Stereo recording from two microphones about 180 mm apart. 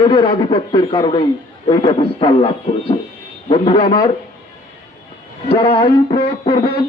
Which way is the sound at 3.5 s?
30° left (ahead or behind).